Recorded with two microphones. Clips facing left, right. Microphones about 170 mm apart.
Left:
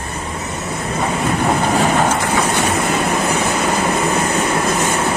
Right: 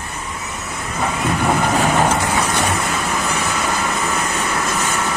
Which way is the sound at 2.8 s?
25° left (ahead or behind).